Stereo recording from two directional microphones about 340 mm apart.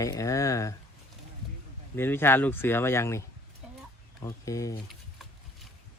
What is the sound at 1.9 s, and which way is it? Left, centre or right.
Speech, centre.